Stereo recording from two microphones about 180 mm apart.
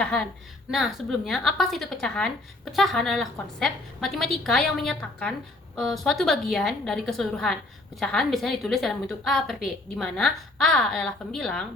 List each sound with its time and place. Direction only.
0.0 s a woman's voice: 5° left (ahead or behind)